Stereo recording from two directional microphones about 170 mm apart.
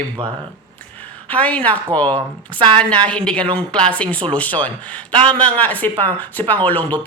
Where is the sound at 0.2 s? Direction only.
30° right (ahead or behind).